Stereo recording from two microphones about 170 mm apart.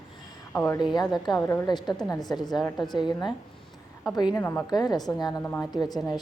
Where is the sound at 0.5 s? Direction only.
15° left (ahead or behind).